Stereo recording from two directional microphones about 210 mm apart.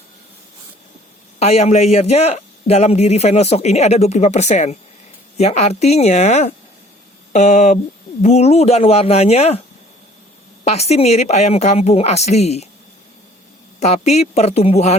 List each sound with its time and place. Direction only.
1.4 s a man's voice: 30° left (ahead or behind)
10.6 s a man's voice: 30° left (ahead or behind)
13.7 s a man's voice: 30° left (ahead or behind)